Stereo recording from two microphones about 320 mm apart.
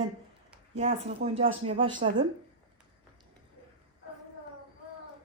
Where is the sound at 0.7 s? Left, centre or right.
Centre.